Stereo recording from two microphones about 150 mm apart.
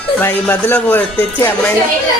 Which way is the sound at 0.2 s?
15° left (ahead or behind).